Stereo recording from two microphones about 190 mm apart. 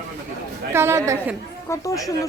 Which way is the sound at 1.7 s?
15° left (ahead or behind).